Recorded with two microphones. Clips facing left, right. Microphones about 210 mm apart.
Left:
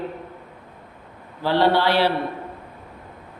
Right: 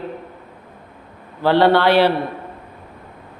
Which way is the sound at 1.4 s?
60° right (ahead or behind).